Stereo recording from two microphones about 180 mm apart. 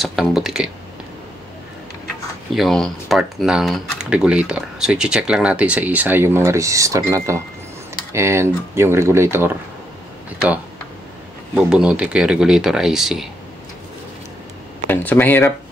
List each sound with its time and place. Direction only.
0.0 s speech: centre (ahead or behind)
2.5 s speech: centre (ahead or behind)
11.5 s speech: 5° right (ahead or behind)
14.9 s speech: 10° left (ahead or behind)